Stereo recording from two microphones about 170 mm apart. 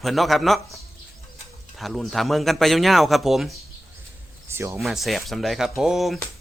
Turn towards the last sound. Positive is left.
turn(degrees=0)  # may be behind; listen again after turning